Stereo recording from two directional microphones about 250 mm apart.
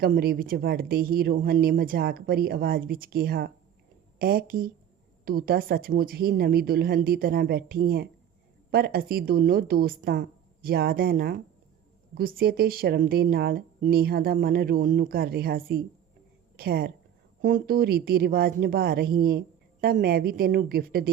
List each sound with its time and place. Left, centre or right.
0.0 s speech: right